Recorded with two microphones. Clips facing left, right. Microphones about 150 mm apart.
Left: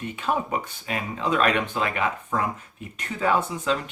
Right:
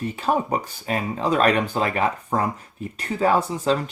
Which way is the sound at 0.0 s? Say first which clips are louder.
Right 4 dB; 35° right (ahead or behind).